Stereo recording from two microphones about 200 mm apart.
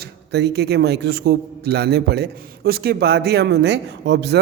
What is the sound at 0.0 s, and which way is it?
A man's voice, 55° right (ahead or behind).